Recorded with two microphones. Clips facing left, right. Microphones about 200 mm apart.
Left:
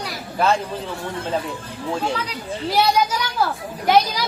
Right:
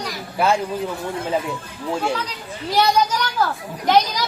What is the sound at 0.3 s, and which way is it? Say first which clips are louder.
Speech: even; 10° right (ahead or behind).